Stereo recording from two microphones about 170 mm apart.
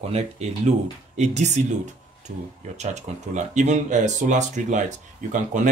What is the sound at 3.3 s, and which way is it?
Speech, 45° right (ahead or behind).